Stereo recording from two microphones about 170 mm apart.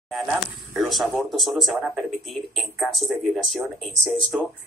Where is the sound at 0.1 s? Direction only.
Centre (ahead or behind).